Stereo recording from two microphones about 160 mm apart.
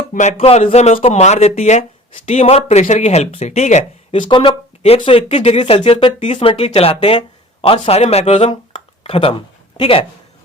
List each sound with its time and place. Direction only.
0.1 s speech: 50° left (ahead or behind)
4.3 s speech: 30° left (ahead or behind)